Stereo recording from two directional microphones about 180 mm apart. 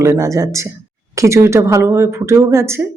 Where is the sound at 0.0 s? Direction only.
15° right (ahead or behind).